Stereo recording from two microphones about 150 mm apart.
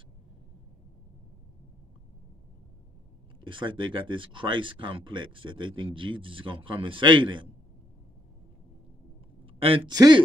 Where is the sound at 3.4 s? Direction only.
35° right (ahead or behind).